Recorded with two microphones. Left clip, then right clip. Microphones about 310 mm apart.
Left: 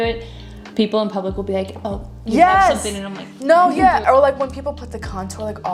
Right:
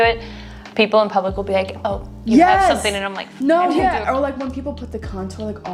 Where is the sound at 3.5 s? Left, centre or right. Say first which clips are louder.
Left 3 dB; left.